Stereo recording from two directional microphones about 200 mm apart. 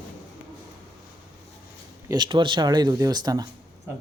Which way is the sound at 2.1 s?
20° right (ahead or behind).